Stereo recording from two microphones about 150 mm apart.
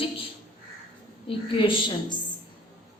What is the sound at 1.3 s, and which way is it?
Speech, 35° left (ahead or behind).